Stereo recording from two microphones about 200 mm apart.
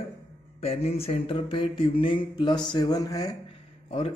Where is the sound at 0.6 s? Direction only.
30° left (ahead or behind).